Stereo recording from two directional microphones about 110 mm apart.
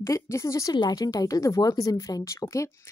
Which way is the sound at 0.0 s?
25° left (ahead or behind).